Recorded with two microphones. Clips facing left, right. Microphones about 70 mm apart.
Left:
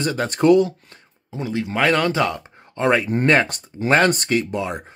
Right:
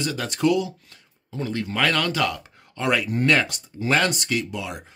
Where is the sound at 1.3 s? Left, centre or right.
Centre.